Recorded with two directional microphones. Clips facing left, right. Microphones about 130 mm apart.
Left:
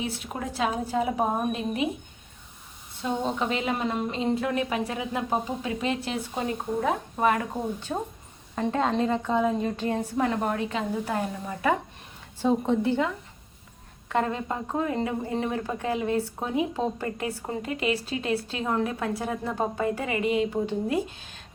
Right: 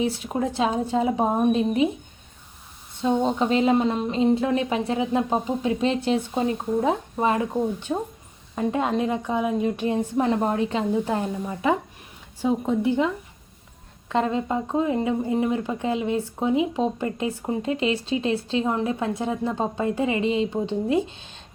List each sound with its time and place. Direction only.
0.0 s a woman's voice: 25° right (ahead or behind)
3.0 s a woman's voice: 30° right (ahead or behind)
14.1 s a woman's voice: 20° right (ahead or behind)